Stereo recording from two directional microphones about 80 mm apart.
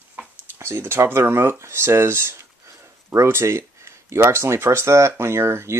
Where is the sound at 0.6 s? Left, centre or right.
Right.